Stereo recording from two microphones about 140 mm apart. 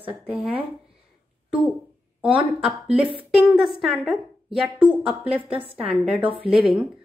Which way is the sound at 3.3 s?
5° right (ahead or behind).